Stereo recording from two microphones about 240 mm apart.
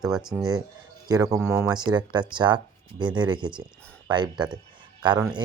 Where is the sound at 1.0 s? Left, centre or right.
Centre.